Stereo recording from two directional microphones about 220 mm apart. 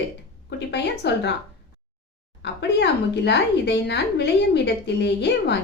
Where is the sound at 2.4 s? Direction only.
50° left (ahead or behind).